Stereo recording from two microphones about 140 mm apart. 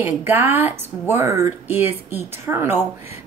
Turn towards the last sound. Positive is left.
turn(degrees=-15)  # may be behind; listen again after turning